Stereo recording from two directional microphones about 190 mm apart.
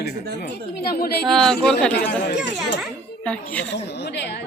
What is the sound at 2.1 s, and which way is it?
Speech, 60° left (ahead or behind).